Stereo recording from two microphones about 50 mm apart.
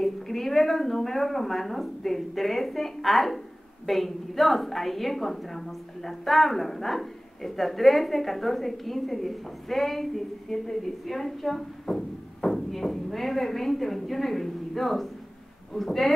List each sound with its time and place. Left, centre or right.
0.0 s a woman's voice: centre